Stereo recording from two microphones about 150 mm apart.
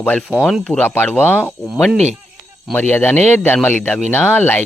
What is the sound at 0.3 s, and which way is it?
Speech, 5° right (ahead or behind).